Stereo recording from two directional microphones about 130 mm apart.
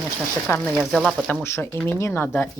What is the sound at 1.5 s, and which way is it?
Speech, 20° left (ahead or behind).